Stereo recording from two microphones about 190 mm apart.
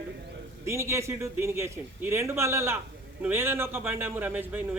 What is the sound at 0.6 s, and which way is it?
Speech, 15° right (ahead or behind).